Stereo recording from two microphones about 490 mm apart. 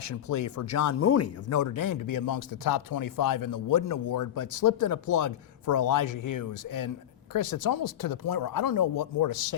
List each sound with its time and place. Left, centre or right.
0.0 s speech: left